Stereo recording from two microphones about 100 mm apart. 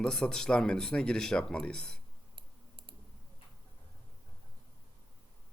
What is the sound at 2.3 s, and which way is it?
Clicking, 55° right (ahead or behind).